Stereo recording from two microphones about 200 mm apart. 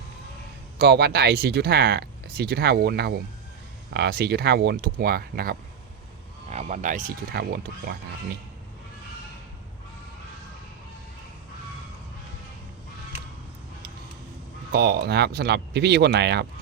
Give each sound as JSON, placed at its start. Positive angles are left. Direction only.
{"t": 0.8, "sound": "speech", "side_deg": -55}
{"t": 6.5, "sound": "speech", "side_deg": -35}
{"t": 14.7, "sound": "speech", "side_deg": -50}